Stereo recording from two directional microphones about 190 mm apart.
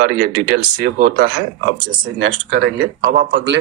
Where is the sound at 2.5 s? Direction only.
55° right (ahead or behind).